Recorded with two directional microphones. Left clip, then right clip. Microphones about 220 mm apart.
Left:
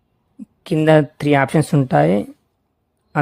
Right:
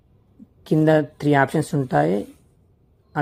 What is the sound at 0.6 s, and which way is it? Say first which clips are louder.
Speech: left 4 dB; 30° left (ahead or behind).